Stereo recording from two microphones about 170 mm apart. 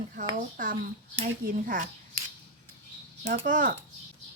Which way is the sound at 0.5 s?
55° right (ahead or behind).